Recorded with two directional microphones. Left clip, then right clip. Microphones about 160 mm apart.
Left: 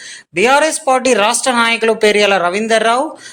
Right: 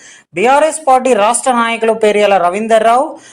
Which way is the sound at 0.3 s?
25° left (ahead or behind).